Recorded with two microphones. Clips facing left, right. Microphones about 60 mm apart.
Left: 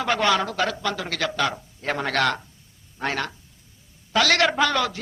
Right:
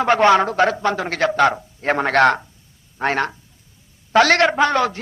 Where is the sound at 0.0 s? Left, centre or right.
Right.